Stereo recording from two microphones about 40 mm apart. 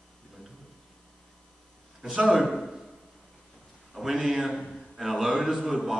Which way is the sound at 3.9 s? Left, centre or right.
Centre.